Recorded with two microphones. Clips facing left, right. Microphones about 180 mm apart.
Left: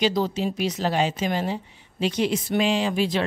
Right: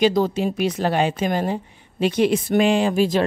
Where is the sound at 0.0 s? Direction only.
50° right (ahead or behind).